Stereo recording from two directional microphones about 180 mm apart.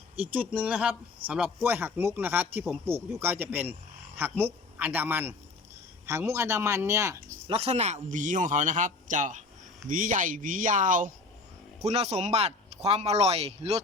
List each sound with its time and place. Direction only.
0.2 s a man's voice: 10° right (ahead or behind)
4.8 s a man's voice: 10° right (ahead or behind)
7.4 s a man's voice: 35° right (ahead or behind)